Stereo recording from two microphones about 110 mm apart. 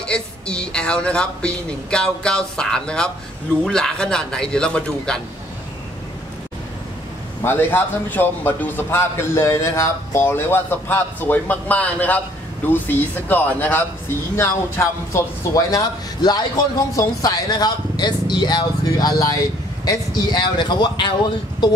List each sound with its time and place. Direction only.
0.0 s speech: 10° left (ahead or behind)
7.4 s a man's voice: 20° left (ahead or behind); by 21.1 s 45° left (ahead or behind)